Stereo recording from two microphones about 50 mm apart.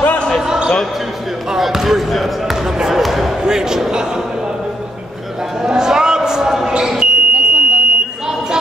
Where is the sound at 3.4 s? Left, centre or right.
Centre.